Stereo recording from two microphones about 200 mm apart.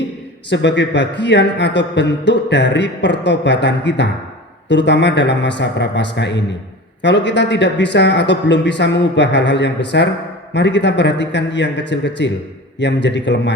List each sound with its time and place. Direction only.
0.5 s a man's voice: 60° left (ahead or behind)